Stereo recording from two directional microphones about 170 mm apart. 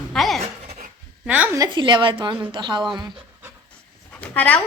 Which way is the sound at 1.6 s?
25° right (ahead or behind).